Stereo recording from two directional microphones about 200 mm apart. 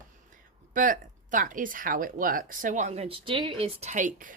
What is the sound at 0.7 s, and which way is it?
Speech, 40° right (ahead or behind).